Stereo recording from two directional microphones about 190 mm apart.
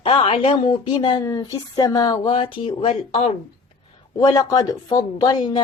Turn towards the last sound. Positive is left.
turn(degrees=25)  # may be behind; listen again after turning